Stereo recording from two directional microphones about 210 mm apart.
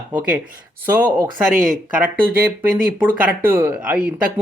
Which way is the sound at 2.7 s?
5° right (ahead or behind).